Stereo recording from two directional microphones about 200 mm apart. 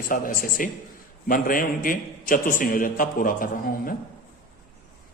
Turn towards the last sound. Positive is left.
turn(degrees=45)  # may be behind; listen again after turning